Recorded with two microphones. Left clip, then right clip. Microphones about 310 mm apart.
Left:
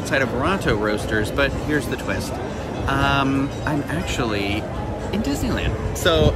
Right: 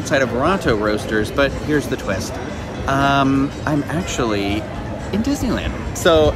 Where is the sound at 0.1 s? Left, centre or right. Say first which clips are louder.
Right 4 dB; centre.